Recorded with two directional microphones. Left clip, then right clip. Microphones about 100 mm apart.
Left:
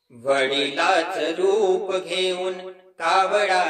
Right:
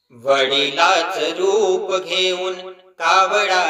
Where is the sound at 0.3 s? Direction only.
15° right (ahead or behind).